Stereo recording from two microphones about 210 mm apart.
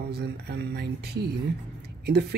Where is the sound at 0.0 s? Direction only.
50° right (ahead or behind).